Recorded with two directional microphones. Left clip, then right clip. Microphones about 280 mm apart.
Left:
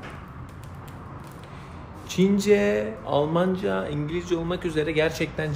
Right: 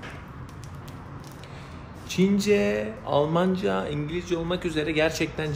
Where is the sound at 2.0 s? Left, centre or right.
Centre.